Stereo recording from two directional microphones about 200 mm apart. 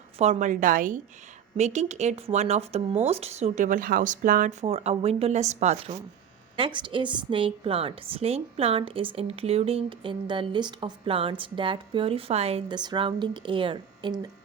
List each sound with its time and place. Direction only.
0.2 s speech: 35° right (ahead or behind)
4.6 s a woman's voice: 30° right (ahead or behind)